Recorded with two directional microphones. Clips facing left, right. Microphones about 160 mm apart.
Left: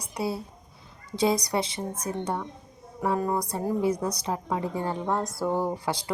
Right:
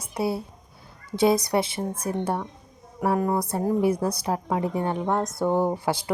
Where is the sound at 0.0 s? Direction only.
25° right (ahead or behind).